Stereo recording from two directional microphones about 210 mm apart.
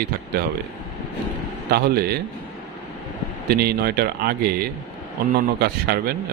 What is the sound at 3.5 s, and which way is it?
Speech, 45° right (ahead or behind).